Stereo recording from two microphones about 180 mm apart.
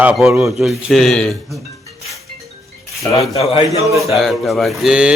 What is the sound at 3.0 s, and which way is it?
Speech, 15° left (ahead or behind).